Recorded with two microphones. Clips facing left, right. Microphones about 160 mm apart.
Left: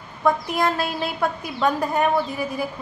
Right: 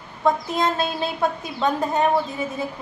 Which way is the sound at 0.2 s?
25° right (ahead or behind).